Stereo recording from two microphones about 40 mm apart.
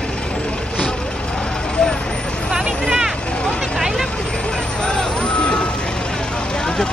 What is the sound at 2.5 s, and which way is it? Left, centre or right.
Vehicle, centre.